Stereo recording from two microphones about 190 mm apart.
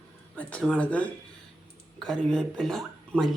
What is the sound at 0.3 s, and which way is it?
Speech, 5° left (ahead or behind).